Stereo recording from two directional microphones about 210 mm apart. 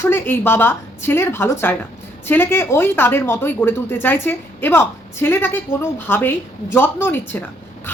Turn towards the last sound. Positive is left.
turn(degrees=10)  # may be behind; listen again after turning